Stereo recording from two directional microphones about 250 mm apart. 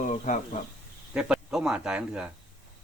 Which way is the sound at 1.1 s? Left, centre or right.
Centre.